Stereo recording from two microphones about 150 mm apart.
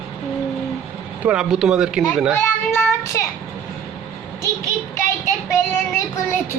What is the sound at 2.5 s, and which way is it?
Child singing, 15° left (ahead or behind).